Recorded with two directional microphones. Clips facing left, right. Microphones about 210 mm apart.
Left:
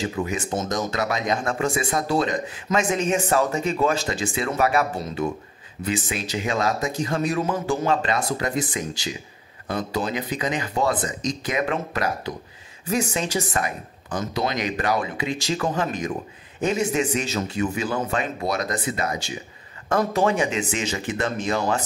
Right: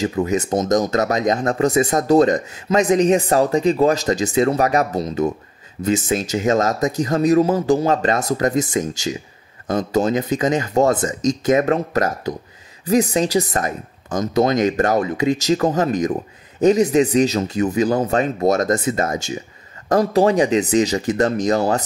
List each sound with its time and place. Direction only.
0.0 s speech: 40° right (ahead or behind)